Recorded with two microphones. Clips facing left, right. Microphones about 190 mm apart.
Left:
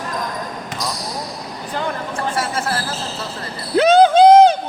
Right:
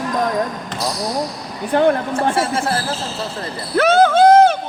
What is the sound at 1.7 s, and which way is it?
Speech, 60° right (ahead or behind).